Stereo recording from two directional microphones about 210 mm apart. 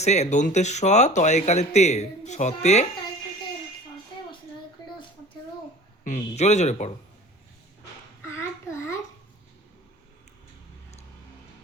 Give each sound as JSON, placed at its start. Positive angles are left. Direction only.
{"t": 0.0, "sound": "speech", "side_deg": 35}
{"t": 6.1, "sound": "speech", "side_deg": 35}